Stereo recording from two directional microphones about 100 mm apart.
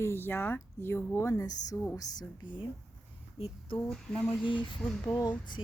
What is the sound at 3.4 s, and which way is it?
Speech, 90° left.